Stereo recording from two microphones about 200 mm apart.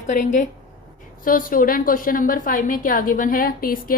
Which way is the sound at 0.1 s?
40° left (ahead or behind).